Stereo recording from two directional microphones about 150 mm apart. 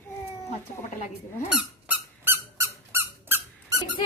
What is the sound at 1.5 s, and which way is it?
Squeak, 10° right (ahead or behind).